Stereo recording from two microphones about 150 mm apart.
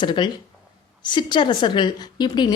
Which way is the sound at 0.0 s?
30° left (ahead or behind).